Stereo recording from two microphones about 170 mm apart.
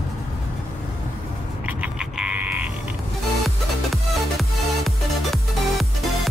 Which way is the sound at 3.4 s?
Centre (ahead or behind).